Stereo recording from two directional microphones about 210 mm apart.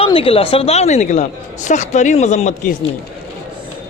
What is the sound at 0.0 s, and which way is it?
A woman's voice, 25° left (ahead or behind).